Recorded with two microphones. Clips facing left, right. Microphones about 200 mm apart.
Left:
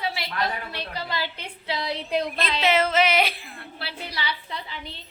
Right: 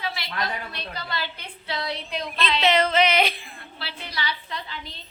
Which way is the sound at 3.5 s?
65° left (ahead or behind).